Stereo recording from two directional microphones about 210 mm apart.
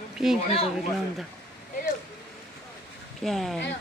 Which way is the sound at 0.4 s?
30° left (ahead or behind).